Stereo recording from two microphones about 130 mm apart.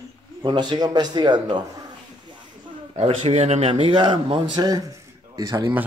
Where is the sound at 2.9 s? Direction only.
50° right (ahead or behind); by 5.7 s 25° right (ahead or behind).